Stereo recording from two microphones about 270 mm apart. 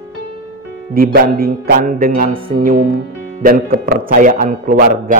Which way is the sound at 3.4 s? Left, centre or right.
Right.